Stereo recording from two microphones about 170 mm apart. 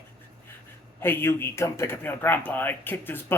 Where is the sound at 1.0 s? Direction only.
15° left (ahead or behind).